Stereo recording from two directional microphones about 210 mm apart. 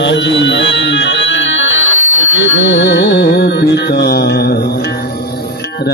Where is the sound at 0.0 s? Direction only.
55° left (ahead or behind).